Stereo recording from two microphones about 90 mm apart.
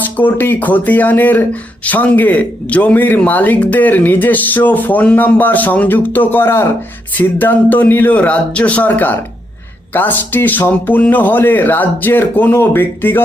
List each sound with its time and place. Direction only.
0.0 s speech: 20° left (ahead or behind)